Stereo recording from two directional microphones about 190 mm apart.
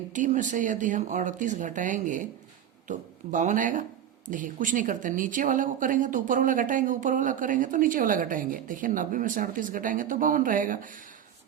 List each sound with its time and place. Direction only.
0.1 s speech: 40° right (ahead or behind)